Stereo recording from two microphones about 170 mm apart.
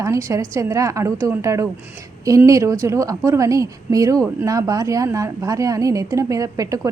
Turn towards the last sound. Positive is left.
turn(degrees=-20)  # may be behind; listen again after turning